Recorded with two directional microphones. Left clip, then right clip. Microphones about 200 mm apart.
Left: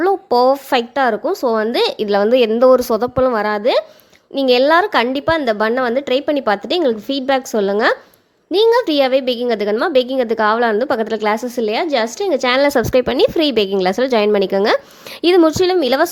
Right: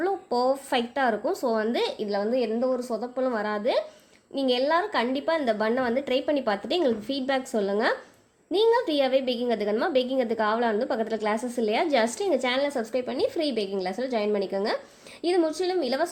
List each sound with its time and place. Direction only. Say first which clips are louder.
0.0 s a woman's voice: left 12 dB; 30° left (ahead or behind)